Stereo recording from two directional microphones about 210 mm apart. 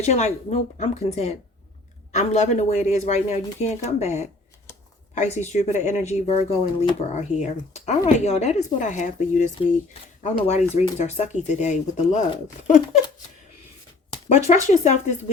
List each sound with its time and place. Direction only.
0.0 s speech: 30° left (ahead or behind)
5.4 s speech: 30° left (ahead or behind)
14.3 s speech: 35° left (ahead or behind)